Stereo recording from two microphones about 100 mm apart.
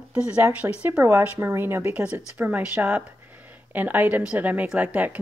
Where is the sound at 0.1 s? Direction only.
15° right (ahead or behind).